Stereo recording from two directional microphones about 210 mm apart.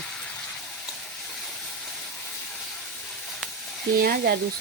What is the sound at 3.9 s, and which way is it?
Speech, 45° right (ahead or behind).